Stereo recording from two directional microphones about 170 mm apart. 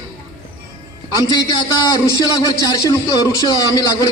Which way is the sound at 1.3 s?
25° left (ahead or behind).